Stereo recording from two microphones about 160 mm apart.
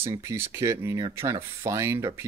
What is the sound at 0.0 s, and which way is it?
Speech, 20° right (ahead or behind).